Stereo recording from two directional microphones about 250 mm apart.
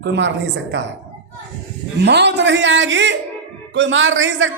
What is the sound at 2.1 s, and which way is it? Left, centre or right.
A man's voice, right.